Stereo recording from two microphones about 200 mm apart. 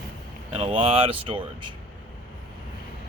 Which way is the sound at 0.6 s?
25° right (ahead or behind).